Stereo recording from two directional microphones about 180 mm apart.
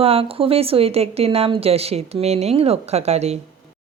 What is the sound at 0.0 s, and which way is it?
Speech, 35° right (ahead or behind).